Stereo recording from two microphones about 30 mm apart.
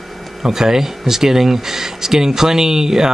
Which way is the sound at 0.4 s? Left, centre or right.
Centre.